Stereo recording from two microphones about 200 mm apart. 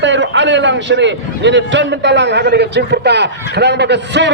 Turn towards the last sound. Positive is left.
turn(degrees=-60)  # may be behind; listen again after turning